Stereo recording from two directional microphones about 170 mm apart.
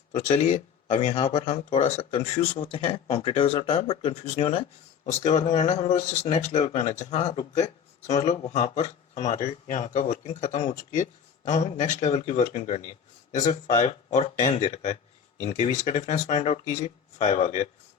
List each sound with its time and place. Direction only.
0.1 s speech: 40° left (ahead or behind)